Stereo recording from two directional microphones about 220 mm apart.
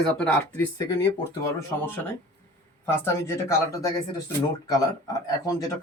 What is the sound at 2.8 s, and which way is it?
Speech, 10° left (ahead or behind).